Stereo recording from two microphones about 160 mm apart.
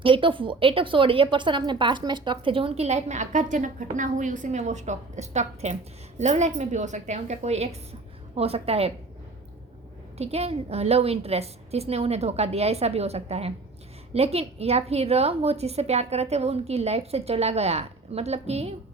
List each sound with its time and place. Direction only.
0.0 s a woman's voice: 35° right (ahead or behind)
10.2 s a woman's voice: 40° right (ahead or behind)